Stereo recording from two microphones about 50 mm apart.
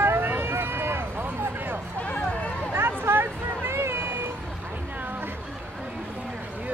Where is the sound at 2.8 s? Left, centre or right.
Right.